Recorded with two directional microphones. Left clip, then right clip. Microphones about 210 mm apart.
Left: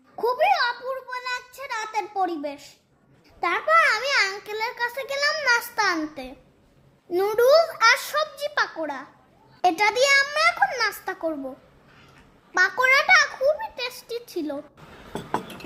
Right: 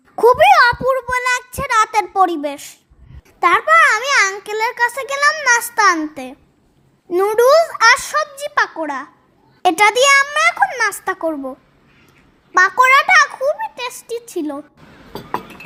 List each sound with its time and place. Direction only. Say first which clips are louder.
0.2 s a sound: right 12 dB; 35° right (ahead or behind)
3.4 s a child's voice: right 8 dB; 25° right (ahead or behind)
12.5 s a child's voice: right 8 dB; 20° right (ahead or behind)